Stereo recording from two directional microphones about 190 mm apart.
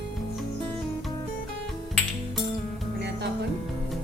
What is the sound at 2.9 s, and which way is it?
Music, 65° right (ahead or behind).